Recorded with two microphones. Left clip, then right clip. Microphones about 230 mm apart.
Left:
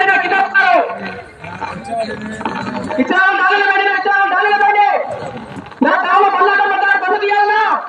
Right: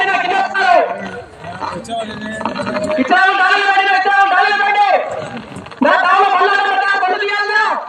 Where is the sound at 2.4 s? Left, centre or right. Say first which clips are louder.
Right 3 dB; right.